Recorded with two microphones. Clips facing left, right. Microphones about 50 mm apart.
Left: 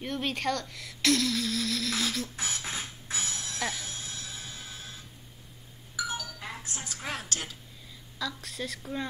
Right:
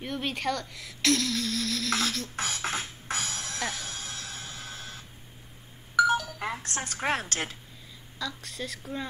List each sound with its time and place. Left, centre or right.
0.0 s speech: centre
2.3 s music: right
3.5 s speech: centre
3.8 s music: right
5.9 s a sound: right
6.6 s a woman's voice: right
8.2 s speech: centre